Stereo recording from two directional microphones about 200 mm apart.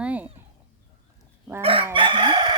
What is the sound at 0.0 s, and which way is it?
Chicken, 5° right (ahead or behind).